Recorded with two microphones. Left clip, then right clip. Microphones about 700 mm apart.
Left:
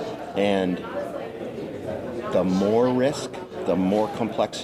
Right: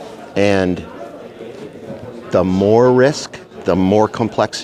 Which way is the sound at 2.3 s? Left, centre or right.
Right.